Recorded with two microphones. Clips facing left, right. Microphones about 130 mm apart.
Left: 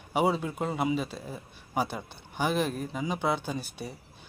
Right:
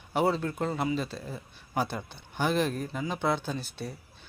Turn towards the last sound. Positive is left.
turn(degrees=10)  # may be behind; listen again after turning